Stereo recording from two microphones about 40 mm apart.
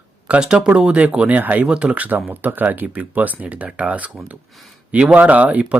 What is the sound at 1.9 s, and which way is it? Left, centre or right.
Speech, right.